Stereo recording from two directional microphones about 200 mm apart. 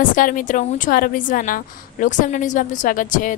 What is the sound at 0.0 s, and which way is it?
A woman's voice, 40° left (ahead or behind).